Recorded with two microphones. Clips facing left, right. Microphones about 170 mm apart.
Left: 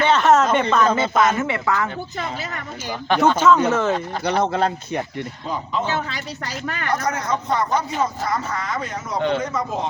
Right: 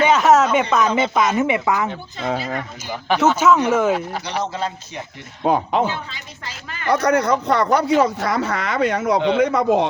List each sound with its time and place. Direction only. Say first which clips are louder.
0.0 s speech: right 2 dB; 5° right (ahead or behind)
3.1 s speech: even; 5° right (ahead or behind)
4.2 s speech: left 5 dB; 55° left (ahead or behind)
5.4 s speech: right 10 dB; 70° right (ahead or behind)
6.9 s speech: right 7 dB; 65° right (ahead or behind)